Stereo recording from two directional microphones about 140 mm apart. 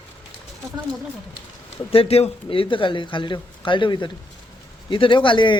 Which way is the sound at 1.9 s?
45° left (ahead or behind).